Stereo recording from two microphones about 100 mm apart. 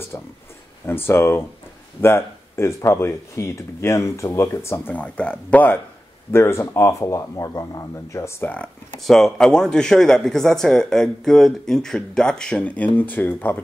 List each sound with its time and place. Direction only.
0.8 s speech: 25° left (ahead or behind)
4.9 s speech: 10° left (ahead or behind)
6.3 s speech: 25° left (ahead or behind)
9.0 s speech: 5° left (ahead or behind)